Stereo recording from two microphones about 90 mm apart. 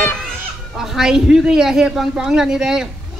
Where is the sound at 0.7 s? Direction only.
5° right (ahead or behind).